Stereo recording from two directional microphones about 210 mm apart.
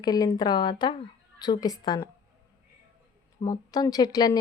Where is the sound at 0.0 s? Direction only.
20° left (ahead or behind).